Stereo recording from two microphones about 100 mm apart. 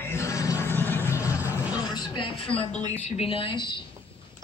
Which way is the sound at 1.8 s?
45° left (ahead or behind).